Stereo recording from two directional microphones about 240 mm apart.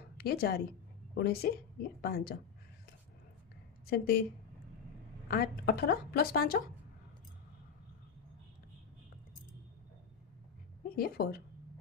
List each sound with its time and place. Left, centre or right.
0.2 s a woman's voice: left
3.8 s speech: left
5.3 s a woman's voice: left
11.0 s a woman's voice: left